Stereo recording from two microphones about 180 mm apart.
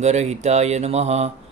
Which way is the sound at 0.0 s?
40° right (ahead or behind).